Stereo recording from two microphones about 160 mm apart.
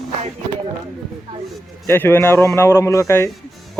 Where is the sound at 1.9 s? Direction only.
15° left (ahead or behind).